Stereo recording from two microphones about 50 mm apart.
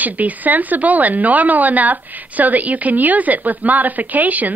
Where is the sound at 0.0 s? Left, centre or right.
Right.